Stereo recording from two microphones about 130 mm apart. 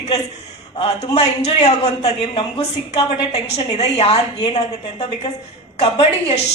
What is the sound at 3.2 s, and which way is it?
Speech, 55° left (ahead or behind).